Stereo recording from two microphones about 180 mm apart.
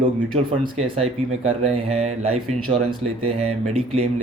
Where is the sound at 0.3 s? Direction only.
35° right (ahead or behind).